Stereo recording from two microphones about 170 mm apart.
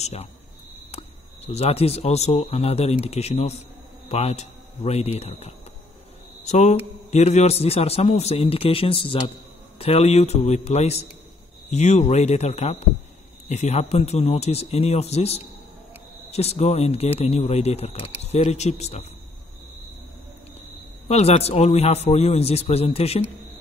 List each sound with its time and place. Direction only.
0.0 s speech: 40° left (ahead or behind)
21.1 s speech: 40° left (ahead or behind)